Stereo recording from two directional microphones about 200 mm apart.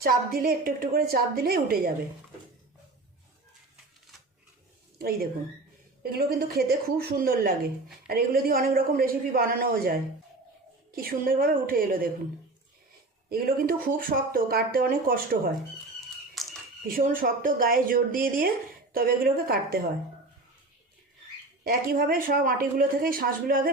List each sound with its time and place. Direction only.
0.0 s speech: 50° right (ahead or behind)
4.9 s speech: 50° right (ahead or behind)
13.3 s speech: 45° right (ahead or behind)
16.0 s a sound: centre (ahead or behind)
16.8 s speech: 45° right (ahead or behind)
21.6 s speech: 45° right (ahead or behind)